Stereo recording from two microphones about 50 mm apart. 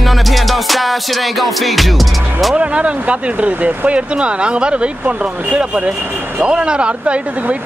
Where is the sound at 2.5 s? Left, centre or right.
Right.